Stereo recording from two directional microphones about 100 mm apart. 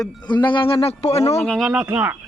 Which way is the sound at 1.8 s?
20° right (ahead or behind).